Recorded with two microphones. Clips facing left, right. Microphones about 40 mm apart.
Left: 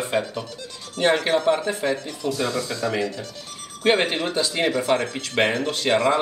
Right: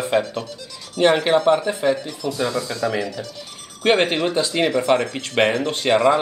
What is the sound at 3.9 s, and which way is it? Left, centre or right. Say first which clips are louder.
Speech: right 4 dB; centre.